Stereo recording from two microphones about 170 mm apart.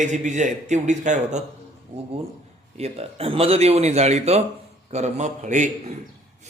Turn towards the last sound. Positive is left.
turn(degrees=-45)  # may be behind; listen again after turning